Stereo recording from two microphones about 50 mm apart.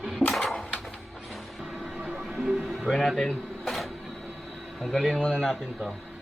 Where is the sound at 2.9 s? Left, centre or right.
Centre.